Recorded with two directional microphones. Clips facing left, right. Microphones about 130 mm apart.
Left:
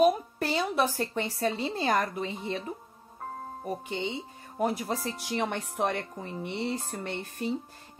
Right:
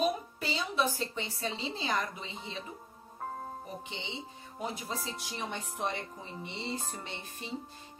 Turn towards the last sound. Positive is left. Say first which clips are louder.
# left 8 dB
turn(degrees=55)  # may be behind; listen again after turning